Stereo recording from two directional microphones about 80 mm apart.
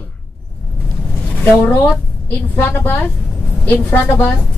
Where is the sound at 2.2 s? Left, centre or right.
Left.